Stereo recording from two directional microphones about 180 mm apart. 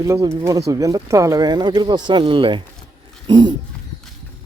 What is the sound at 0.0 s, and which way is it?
Speech, 15° right (ahead or behind).